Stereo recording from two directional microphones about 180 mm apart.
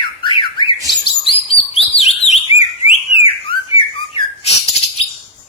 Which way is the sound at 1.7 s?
35° left (ahead or behind).